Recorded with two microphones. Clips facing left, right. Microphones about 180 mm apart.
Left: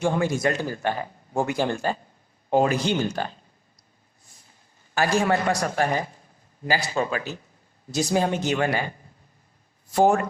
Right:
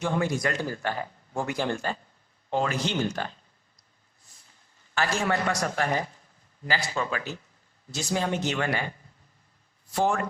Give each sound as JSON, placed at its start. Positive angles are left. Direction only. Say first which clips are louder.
{"t": 0.0, "sound": "a man's voice", "louder": "left 4 dB", "side_deg": 25}
{"t": 3.0, "sound": "a man's voice", "louder": "left 2 dB", "side_deg": 30}
{"t": 4.9, "sound": "a man's voice", "louder": "left 5 dB", "side_deg": 35}
{"t": 9.9, "sound": "a man's voice", "louder": "left 6 dB", "side_deg": 40}